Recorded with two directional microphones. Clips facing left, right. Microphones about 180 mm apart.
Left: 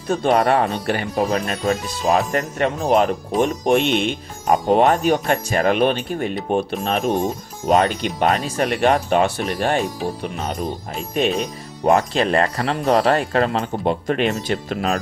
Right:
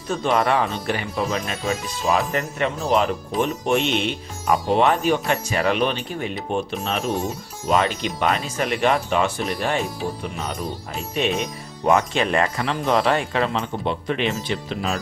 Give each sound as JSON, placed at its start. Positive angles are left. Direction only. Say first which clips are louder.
{"t": 0.2, "sound": "speech", "louder": "left 3 dB", "side_deg": 50}
{"t": 11.9, "sound": "speech", "louder": "left 2 dB", "side_deg": 35}